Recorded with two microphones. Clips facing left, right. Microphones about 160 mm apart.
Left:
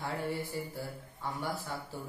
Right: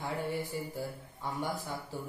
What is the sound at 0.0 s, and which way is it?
Mantra, 15° right (ahead or behind).